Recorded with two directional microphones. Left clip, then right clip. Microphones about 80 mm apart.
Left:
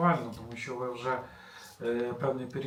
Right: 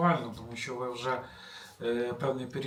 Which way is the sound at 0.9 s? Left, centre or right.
Right.